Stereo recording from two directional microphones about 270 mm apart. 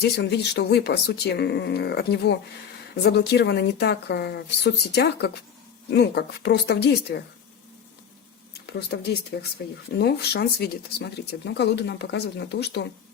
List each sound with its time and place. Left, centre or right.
0.0 s speech: left
8.6 s speech: left